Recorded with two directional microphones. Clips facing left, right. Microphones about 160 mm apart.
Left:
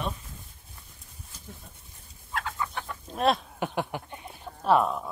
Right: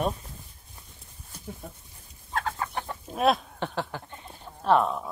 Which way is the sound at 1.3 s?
60° right (ahead or behind).